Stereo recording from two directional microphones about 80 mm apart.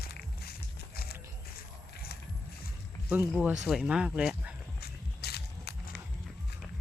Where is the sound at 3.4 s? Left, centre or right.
Centre.